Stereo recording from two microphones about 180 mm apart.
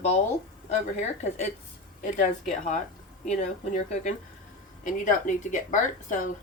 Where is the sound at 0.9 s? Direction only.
40° left (ahead or behind).